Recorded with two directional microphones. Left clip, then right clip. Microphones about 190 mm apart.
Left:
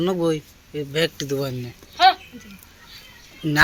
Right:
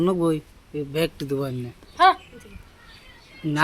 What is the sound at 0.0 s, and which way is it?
Speech, 15° right (ahead or behind).